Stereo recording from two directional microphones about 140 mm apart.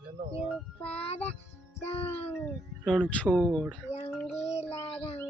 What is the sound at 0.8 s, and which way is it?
Music, 45° left (ahead or behind).